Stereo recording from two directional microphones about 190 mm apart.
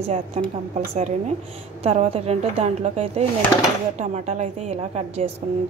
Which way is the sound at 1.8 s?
35° right (ahead or behind).